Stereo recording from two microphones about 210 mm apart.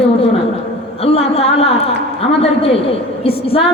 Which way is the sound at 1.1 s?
30° left (ahead or behind).